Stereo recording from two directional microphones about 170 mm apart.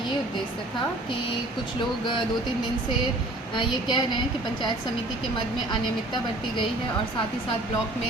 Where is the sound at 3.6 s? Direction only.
25° left (ahead or behind).